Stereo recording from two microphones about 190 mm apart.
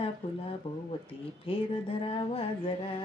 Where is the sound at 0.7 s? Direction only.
30° left (ahead or behind).